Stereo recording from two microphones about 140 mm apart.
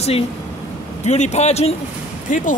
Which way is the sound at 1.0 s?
55° left (ahead or behind).